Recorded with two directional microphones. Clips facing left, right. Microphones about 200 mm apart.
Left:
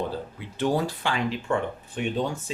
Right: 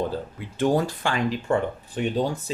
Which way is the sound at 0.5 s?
45° right (ahead or behind).